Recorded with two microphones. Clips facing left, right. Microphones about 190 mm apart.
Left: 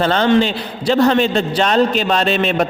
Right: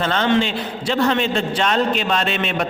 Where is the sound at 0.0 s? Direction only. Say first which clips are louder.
Left 4 dB; 35° left (ahead or behind).